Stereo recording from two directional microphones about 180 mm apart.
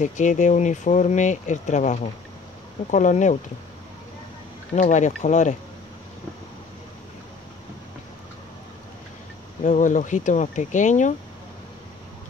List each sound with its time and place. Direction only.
0.0 s speech: 45° left (ahead or behind)
4.7 s speech: 45° left (ahead or behind)
9.6 s speech: 45° left (ahead or behind)